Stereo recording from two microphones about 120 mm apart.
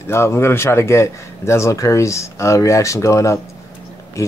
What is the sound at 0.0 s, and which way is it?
Speech, 20° left (ahead or behind).